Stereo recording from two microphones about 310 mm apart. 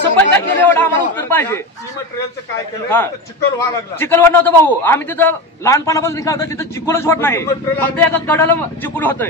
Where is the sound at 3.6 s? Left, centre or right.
Centre.